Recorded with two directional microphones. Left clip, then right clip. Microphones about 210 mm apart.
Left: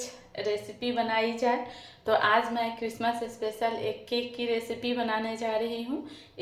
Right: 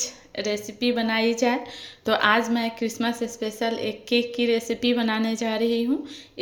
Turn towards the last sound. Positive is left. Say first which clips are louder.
# right 5 dB
turn(degrees=-45)  # may be behind; listen again after turning